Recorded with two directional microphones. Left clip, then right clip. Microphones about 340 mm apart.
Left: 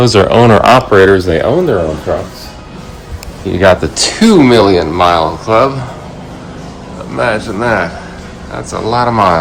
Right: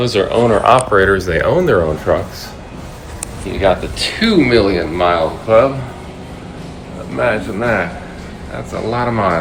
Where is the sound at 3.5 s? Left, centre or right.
Left.